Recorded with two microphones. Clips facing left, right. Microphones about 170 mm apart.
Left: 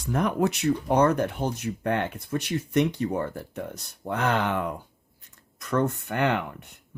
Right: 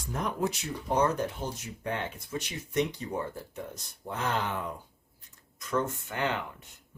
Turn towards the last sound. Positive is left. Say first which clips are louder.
# left 6 dB
turn(degrees=60)  # may be behind; listen again after turning